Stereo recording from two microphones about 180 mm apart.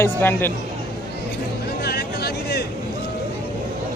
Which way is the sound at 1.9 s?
65° left (ahead or behind).